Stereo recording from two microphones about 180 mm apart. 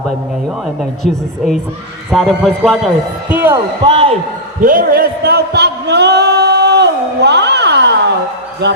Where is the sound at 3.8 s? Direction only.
30° right (ahead or behind).